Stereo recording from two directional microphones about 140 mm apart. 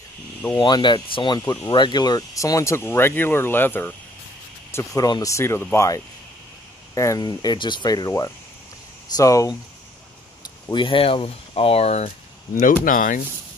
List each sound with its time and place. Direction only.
0.6 s speech: 30° left (ahead or behind)
1.4 s speech: 20° left (ahead or behind)
1.7 s speech: 35° left (ahead or behind); by 3.9 s 15° left (ahead or behind)
4.7 s speech: 25° left (ahead or behind)
10.4 s speech: 35° left (ahead or behind)
12.8 s speech: 75° left (ahead or behind)